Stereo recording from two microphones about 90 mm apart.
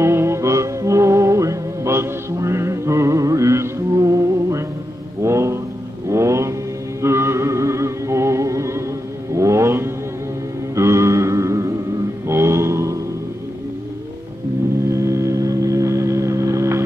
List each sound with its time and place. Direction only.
0.0 s music: 30° right (ahead or behind)
5.2 s a sound: 30° right (ahead or behind)
6.0 s mantra: 35° right (ahead or behind)
7.0 s music: 30° right (ahead or behind)
9.3 s vehicle: 35° right (ahead or behind)
10.8 s mantra: 35° right (ahead or behind)
12.3 s a sound: 30° right (ahead or behind)
14.9 s music: 35° right (ahead or behind)